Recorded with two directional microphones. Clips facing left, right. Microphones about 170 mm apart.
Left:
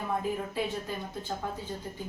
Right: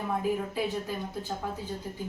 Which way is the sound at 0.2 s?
5° right (ahead or behind).